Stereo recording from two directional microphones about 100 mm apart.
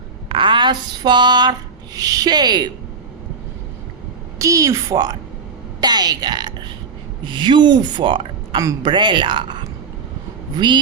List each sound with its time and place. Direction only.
0.3 s a sound: 55° right (ahead or behind)
2.0 s speech: 40° right (ahead or behind)
4.4 s a woman's voice: 35° right (ahead or behind); by 9.6 s 50° right (ahead or behind)